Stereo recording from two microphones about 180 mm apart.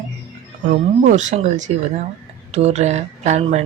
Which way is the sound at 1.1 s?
40° right (ahead or behind).